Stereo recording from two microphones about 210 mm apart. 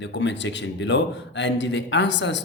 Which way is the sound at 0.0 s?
60° left (ahead or behind).